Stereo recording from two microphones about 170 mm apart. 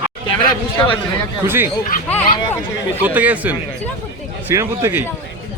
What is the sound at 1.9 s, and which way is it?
Speech, 55° left (ahead or behind).